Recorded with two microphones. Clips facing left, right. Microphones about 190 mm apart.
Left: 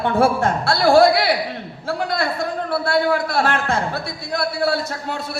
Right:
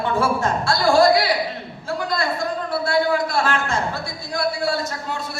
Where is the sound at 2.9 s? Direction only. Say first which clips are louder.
Even; 60° left (ahead or behind).